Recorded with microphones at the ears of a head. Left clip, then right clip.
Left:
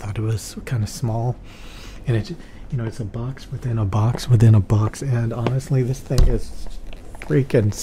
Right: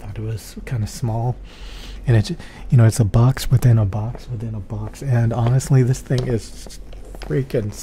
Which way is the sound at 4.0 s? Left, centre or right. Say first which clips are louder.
Left 10 dB; left.